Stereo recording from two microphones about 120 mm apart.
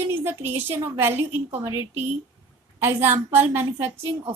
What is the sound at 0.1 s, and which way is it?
A woman's voice, 20° right (ahead or behind).